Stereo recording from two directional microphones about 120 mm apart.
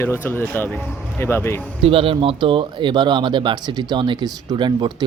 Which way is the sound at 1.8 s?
50° right (ahead or behind).